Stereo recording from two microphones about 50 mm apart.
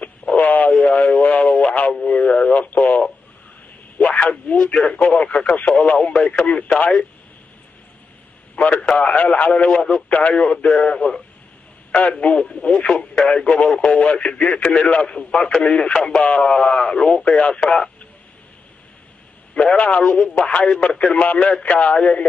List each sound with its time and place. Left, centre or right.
0.4 s radio: left
2.0 s speech: centre
4.0 s speech: left
8.5 s speech: left
9.7 s speech: centre
10.0 s speech: left
12.4 s speech: centre
13.7 s speech: left; by 17.9 s centre
19.6 s speech: left
21.0 s speech: left